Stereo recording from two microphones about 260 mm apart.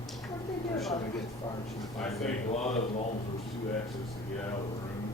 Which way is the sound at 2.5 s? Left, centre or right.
Left.